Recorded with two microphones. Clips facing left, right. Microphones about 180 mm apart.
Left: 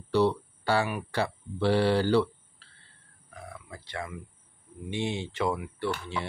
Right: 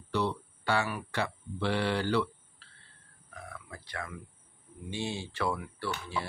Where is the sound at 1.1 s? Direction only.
35° left (ahead or behind).